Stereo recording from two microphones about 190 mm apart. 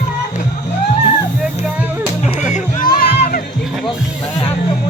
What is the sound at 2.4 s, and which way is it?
Music, 40° left (ahead or behind).